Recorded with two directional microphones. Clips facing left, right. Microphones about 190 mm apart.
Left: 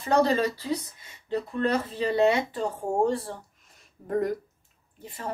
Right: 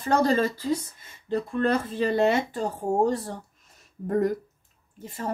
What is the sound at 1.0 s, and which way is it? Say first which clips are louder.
Speech: right 2 dB; 50° right (ahead or behind).